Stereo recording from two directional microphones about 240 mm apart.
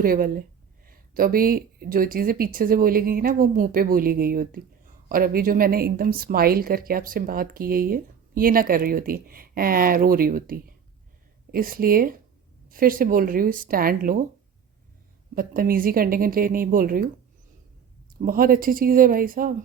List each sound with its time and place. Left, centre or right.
0.0 s speech: right
15.4 s speech: right
18.2 s speech: right